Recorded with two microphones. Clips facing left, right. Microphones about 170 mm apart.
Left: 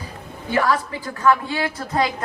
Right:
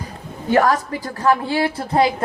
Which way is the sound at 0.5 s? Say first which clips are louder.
Right 4 dB; 45° right (ahead or behind).